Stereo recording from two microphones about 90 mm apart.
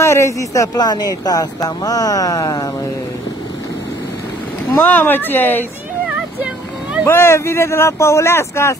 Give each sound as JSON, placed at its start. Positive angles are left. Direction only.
{"t": 0.0, "sound": "speech", "side_deg": 30}
{"t": 4.8, "sound": "speech", "side_deg": 20}
{"t": 7.1, "sound": "speech", "side_deg": 30}